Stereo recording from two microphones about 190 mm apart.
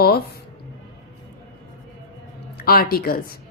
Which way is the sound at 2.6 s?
50° left (ahead or behind).